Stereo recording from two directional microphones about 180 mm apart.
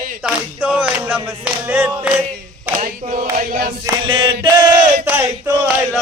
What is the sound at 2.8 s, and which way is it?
Chant, 50° right (ahead or behind).